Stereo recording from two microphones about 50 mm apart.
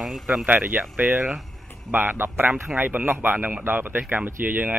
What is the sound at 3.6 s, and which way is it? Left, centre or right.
Speech, right.